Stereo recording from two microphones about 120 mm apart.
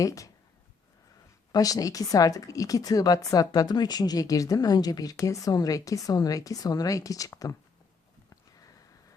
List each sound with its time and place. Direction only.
0.0 s speech: 30° left (ahead or behind)
1.5 s speech: 30° left (ahead or behind)